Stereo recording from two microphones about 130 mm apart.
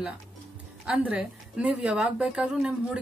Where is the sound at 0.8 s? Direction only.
5° right (ahead or behind).